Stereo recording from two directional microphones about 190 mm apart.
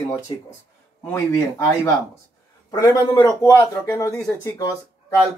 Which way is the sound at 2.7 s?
20° left (ahead or behind).